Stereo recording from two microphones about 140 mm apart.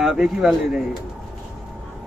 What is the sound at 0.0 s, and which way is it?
Speech, centre (ahead or behind).